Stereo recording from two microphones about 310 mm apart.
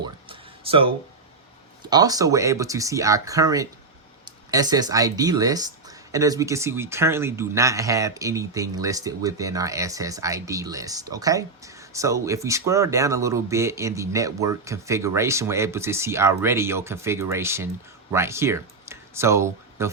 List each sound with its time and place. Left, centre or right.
0.0 s music: centre
1.8 s speech: centre